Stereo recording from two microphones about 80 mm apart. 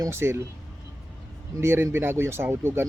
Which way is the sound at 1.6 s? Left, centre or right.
Right.